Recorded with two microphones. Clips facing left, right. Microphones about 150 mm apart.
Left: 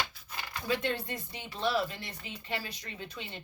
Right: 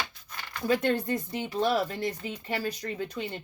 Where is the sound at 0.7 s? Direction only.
45° right (ahead or behind).